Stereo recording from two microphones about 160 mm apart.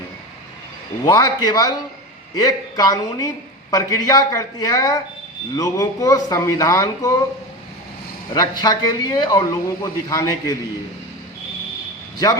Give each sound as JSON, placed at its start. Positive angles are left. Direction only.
{"t": 1.0, "sound": "speech", "side_deg": 20}
{"t": 8.3, "sound": "speech", "side_deg": 25}